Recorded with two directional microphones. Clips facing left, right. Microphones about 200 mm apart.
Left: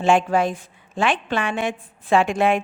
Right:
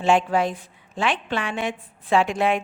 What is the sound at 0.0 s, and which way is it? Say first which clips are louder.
A woman's voice: left 2 dB; 50° left (ahead or behind).